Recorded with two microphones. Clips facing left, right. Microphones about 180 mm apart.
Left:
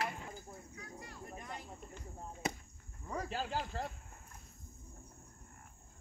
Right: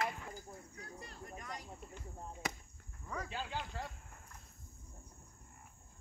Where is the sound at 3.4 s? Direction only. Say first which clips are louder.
Left 4 dB; 45° left (ahead or behind).